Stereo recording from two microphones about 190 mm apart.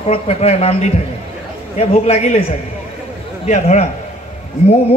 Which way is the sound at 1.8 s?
35° left (ahead or behind).